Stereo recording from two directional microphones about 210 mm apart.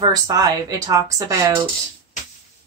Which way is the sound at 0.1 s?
20° right (ahead or behind).